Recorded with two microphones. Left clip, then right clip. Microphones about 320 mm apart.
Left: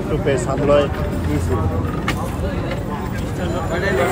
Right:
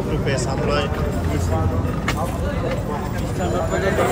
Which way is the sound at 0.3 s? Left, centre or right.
Centre.